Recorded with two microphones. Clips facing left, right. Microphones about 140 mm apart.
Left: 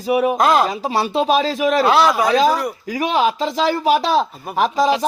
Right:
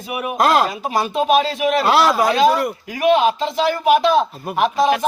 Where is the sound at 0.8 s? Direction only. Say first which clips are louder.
Left 1 dB; 35° left (ahead or behind).